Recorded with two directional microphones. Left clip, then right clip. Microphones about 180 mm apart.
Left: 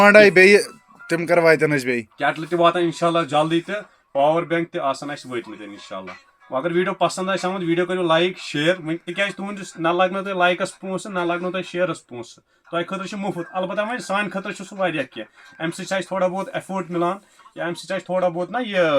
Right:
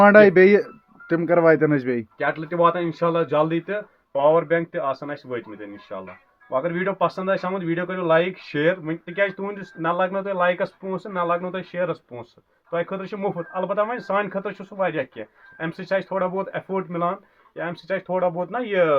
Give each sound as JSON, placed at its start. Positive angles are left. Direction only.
{"t": 0.0, "sound": "speech", "side_deg": -15}
{"t": 6.6, "sound": "speech", "side_deg": -20}